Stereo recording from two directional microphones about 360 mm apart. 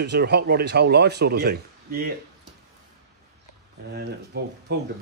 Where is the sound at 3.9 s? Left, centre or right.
Right.